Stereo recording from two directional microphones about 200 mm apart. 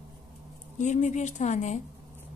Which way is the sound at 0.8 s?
35° left (ahead or behind).